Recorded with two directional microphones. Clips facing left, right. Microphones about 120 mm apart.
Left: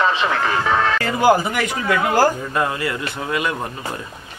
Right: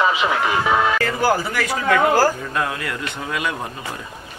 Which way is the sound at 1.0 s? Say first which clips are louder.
Left 3 dB; 20° left (ahead or behind).